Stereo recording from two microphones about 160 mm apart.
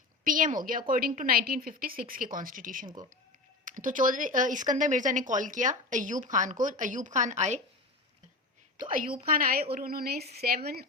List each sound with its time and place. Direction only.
0.3 s a woman's voice: 60° right (ahead or behind)
2.8 s speech: 25° right (ahead or behind)
3.6 s speech: 55° right (ahead or behind)
8.8 s a woman's voice: 60° right (ahead or behind)